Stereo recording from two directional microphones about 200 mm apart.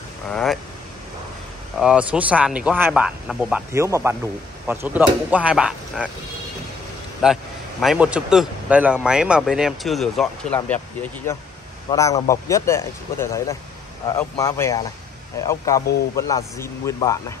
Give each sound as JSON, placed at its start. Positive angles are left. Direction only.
{"t": 0.3, "sound": "a man's voice", "side_deg": 0}
{"t": 1.8, "sound": "a man's voice", "side_deg": -5}
{"t": 7.2, "sound": "a man's voice", "side_deg": -5}